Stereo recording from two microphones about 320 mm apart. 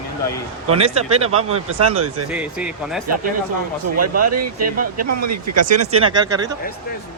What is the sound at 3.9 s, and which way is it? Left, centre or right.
Speech, right.